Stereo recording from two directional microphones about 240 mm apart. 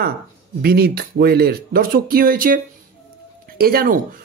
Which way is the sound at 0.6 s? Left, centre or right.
Right.